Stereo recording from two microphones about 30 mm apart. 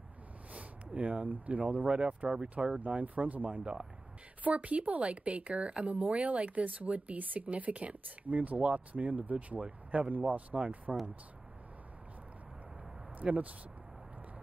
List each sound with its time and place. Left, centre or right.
0.5 s a sound: right
1.3 s speech: right
1.9 s speech: right
2.2 s speech: right
3.0 s speech: right
5.9 s speech: right
10.9 s speech: centre
13.2 s speech: right